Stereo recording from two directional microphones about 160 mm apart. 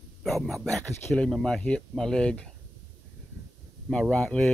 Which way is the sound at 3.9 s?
5° left (ahead or behind).